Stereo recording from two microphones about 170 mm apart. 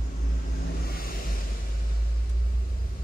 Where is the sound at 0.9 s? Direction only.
60° left (ahead or behind).